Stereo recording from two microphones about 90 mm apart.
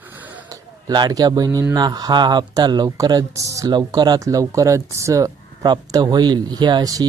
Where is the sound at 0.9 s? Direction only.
50° right (ahead or behind).